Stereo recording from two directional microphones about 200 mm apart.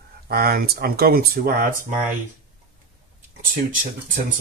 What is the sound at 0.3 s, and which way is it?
Speech, 50° right (ahead or behind).